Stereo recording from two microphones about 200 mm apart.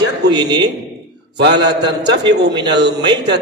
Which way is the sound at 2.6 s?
60° right (ahead or behind).